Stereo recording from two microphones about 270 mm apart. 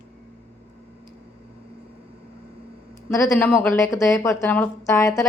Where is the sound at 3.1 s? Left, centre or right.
Centre.